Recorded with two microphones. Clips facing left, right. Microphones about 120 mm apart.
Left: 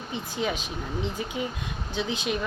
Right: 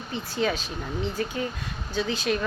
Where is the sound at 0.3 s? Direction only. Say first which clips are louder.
Right 3 dB; 15° left (ahead or behind).